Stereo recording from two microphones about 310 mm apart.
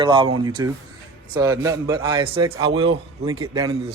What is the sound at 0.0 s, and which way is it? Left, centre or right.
A man's voice, centre.